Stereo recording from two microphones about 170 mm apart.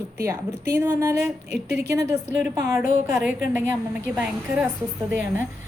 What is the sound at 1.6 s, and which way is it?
Speech, 75° right (ahead or behind).